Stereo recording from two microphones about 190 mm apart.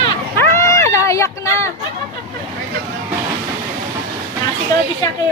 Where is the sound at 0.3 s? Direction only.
15° left (ahead or behind).